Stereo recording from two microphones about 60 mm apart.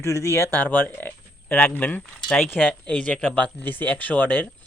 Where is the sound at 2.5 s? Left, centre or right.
Left.